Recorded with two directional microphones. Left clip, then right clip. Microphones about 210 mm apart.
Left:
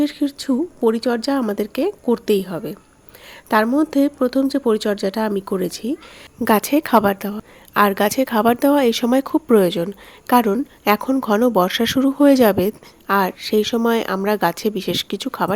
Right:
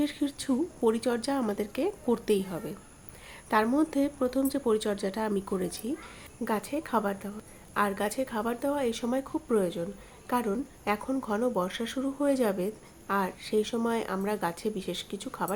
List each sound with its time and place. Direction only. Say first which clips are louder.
0.0 s a woman's voice: left 10 dB; 30° left (ahead or behind)
6.4 s a woman's voice: left 15 dB; 45° left (ahead or behind)